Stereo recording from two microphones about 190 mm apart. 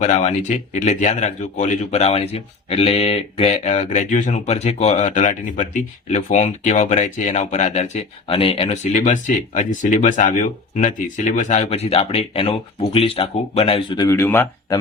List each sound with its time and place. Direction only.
0.0 s speech: 35° left (ahead or behind); by 14.8 s 10° left (ahead or behind)